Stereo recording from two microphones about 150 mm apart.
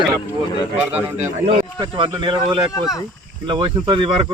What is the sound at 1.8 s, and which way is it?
Speech, 35° right (ahead or behind).